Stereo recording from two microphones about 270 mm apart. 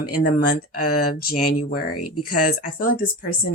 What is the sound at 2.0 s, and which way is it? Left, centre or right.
Speech, left.